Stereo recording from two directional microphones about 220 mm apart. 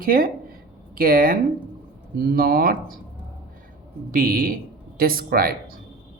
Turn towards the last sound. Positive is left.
turn(degrees=-45)  # may be behind; listen again after turning